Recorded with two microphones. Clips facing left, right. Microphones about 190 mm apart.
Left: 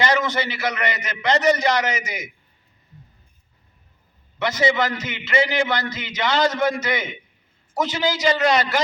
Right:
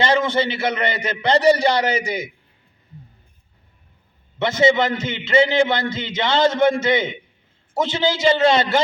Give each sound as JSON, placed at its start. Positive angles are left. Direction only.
{"t": 0.0, "sound": "a man's voice", "side_deg": -30}
{"t": 4.4, "sound": "a man's voice", "side_deg": -25}